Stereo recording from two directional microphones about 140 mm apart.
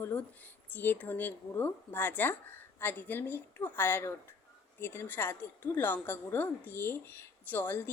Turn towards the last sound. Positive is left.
turn(degrees=15)  # may be behind; listen again after turning